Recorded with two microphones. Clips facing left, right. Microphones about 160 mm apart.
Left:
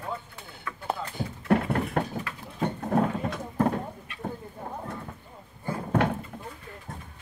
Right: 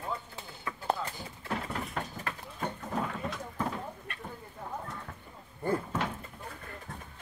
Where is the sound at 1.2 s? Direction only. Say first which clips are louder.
Left 12 dB; 60° left (ahead or behind).